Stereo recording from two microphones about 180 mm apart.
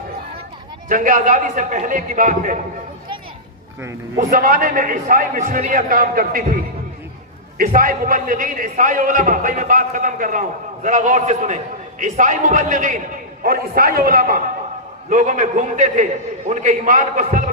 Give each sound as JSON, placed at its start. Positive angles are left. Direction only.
{"t": 0.9, "sound": "a man's voice", "side_deg": -50}
{"t": 4.2, "sound": "a man's voice", "side_deg": -50}
{"t": 7.8, "sound": "a man's voice", "side_deg": -50}